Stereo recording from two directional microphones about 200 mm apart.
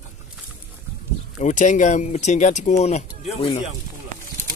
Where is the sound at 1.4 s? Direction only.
40° left (ahead or behind).